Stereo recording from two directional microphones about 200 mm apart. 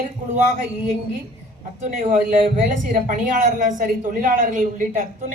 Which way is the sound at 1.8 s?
40° right (ahead or behind).